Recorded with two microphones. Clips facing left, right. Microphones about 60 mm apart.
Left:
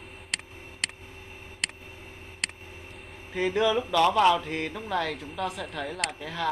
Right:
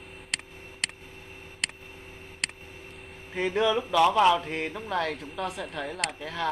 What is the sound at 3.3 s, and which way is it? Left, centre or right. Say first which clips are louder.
Speech: left 1 dB; centre.